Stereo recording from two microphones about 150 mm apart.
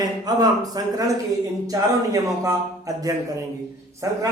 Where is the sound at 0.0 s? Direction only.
25° right (ahead or behind).